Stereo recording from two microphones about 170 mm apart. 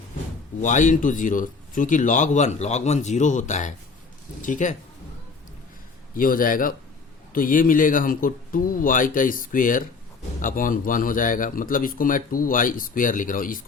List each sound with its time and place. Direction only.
0.6 s a man's voice: 50° left (ahead or behind)
6.1 s a man's voice: 55° left (ahead or behind)